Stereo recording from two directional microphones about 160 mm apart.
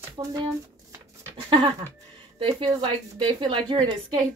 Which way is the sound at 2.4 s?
30° right (ahead or behind).